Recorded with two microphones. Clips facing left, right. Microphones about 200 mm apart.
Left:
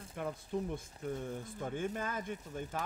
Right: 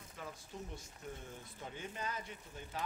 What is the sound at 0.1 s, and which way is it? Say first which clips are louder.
Speech: left 12 dB; 55° left (ahead or behind).